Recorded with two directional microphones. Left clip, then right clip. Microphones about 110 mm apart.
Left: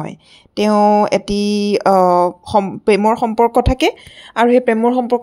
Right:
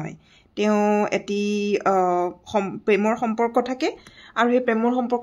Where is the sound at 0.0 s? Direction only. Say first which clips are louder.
Left 8 dB; 55° left (ahead or behind).